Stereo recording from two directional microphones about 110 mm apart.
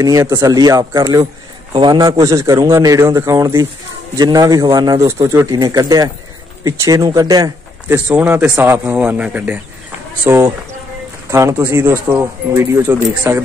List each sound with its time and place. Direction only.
0.0 s speech: 35° right (ahead or behind)
1.7 s a man's voice: 50° right (ahead or behind)
2.0 s speech: 30° right (ahead or behind)
5.0 s speech: 25° right (ahead or behind)
7.9 s a man's voice: 15° right (ahead or behind)